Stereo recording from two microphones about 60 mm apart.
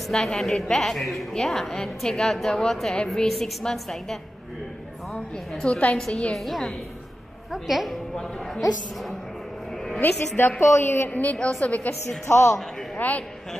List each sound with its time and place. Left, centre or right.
0.1 s a woman's voice: centre
5.7 s a woman's voice: left
6.4 s a woman's voice: centre
9.9 s a woman's voice: left
10.6 s a man's voice: left
11.1 s a woman's voice: left
12.3 s a man's voice: left
12.9 s a man's voice: left